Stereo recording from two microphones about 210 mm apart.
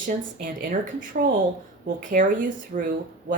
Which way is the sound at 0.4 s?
40° right (ahead or behind).